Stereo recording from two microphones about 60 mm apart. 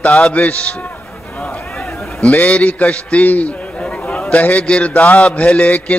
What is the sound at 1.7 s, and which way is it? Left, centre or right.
A man's voice, centre.